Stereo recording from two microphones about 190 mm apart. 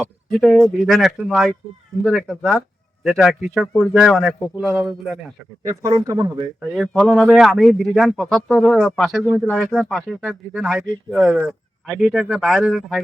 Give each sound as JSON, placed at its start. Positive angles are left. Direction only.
{"t": 0.0, "sound": "speech", "side_deg": 0}
{"t": 5.6, "sound": "speech", "side_deg": -20}
{"t": 6.6, "sound": "speech", "side_deg": 0}